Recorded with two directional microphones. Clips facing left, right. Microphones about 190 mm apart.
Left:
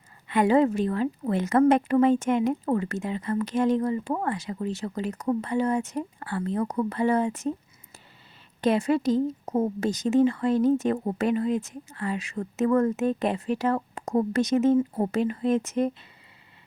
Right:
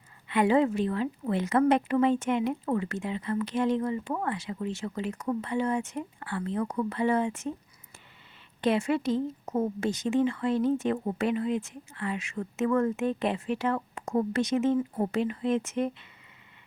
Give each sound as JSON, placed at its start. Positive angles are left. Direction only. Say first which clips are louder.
{"t": 0.3, "sound": "speech", "louder": "left 3 dB", "side_deg": 40}
{"t": 8.6, "sound": "speech", "louder": "left 3 dB", "side_deg": 40}